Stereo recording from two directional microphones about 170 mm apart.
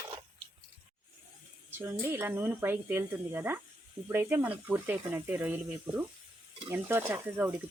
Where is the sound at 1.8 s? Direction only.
15° right (ahead or behind).